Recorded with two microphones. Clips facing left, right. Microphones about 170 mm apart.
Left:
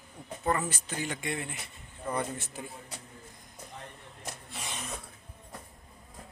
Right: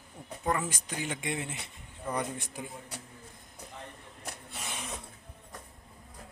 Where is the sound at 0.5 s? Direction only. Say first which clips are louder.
Left 1 dB; 10° right (ahead or behind).